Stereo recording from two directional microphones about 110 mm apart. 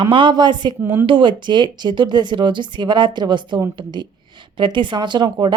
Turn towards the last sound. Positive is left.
turn(degrees=-40)  # may be behind; listen again after turning